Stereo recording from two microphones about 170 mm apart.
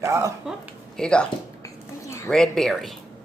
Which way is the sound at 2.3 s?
5° left (ahead or behind).